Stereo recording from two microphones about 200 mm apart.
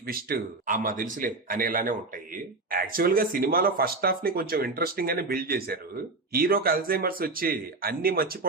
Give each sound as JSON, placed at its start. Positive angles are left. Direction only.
{"t": 0.1, "sound": "speech", "side_deg": -45}